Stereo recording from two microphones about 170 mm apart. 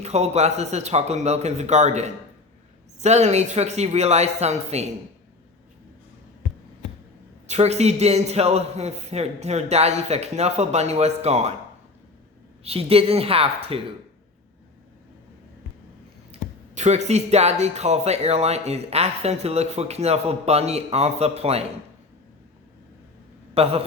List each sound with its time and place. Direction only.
0.0 s speech: 40° right (ahead or behind)
7.4 s speech: 40° right (ahead or behind)
12.6 s speech: 35° right (ahead or behind)
16.3 s speech: 40° right (ahead or behind)
23.6 s speech: 35° right (ahead or behind)